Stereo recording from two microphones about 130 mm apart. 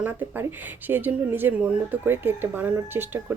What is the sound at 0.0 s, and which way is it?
Speech, 15° right (ahead or behind).